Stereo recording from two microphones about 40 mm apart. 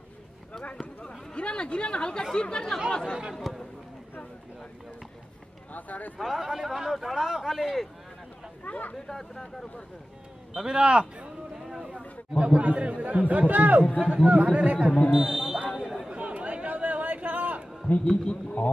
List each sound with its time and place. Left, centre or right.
0.7 s a man's voice: left
3.4 s speech: centre
5.7 s speech: left
6.2 s speech: centre
8.6 s speech: left
9.0 s speech: centre
10.5 s speech: centre
11.5 s a sound: centre
12.4 s speech: right
13.9 s speech: right
15.1 s speech: centre
16.1 s chatter: right
18.0 s a man's voice: centre